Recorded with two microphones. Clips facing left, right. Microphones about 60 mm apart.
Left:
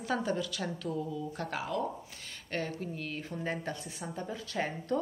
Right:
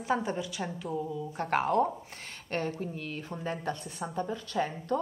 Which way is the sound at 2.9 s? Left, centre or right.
Left.